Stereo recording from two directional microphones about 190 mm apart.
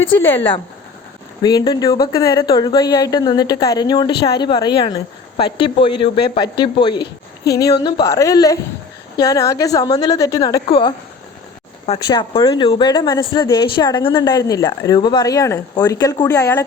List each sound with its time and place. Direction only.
0.1 s a woman's voice: 10° left (ahead or behind)
1.4 s a woman's voice: 20° left (ahead or behind)
12.0 s a woman's voice: 25° left (ahead or behind)